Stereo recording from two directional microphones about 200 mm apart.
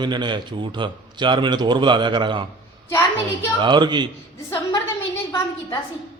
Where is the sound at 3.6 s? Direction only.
20° right (ahead or behind).